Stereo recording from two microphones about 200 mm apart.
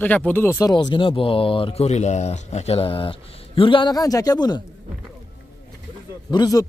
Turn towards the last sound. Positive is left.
turn(degrees=20)  # may be behind; listen again after turning